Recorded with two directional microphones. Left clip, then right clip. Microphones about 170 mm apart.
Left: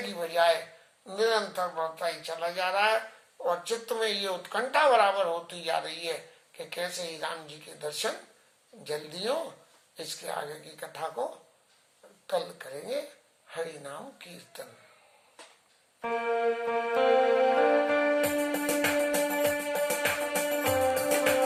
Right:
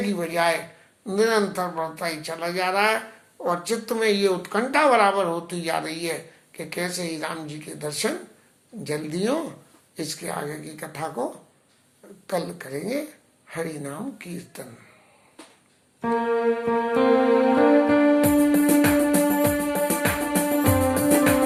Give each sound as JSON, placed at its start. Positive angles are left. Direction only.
{"t": 1.0, "sound": "speech", "side_deg": -15}
{"t": 12.3, "sound": "speech", "side_deg": -15}
{"t": 16.0, "sound": "music", "side_deg": -20}